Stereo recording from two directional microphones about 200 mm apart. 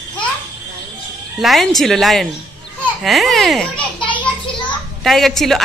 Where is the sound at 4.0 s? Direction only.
25° left (ahead or behind).